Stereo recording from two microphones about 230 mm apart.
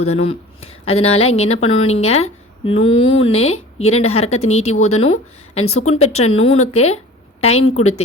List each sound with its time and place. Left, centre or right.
0.0 s speech: left
5.7 s speech: left
6.0 s speech: left